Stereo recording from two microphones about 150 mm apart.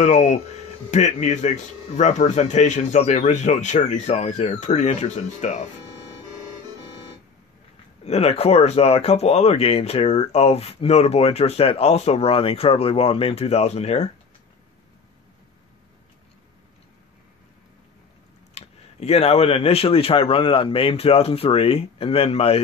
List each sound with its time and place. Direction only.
0.0 s speech: 50° left (ahead or behind)
8.0 s speech: 45° left (ahead or behind)
18.5 s speech: 45° left (ahead or behind)